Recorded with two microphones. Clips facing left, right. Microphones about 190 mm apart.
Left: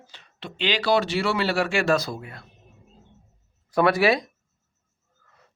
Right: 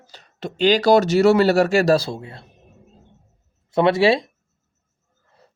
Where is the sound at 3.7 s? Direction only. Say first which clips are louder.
Right 4 dB; 25° right (ahead or behind).